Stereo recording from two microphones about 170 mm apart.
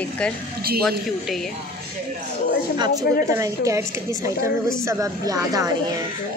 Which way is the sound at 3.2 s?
20° right (ahead or behind).